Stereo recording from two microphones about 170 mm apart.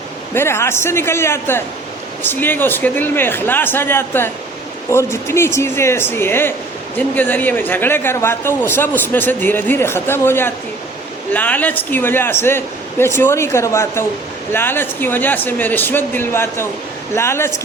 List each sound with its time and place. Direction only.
0.3 s speech: 15° left (ahead or behind)